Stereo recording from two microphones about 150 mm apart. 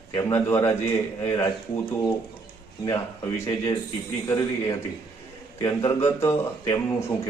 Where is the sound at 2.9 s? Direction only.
20° left (ahead or behind).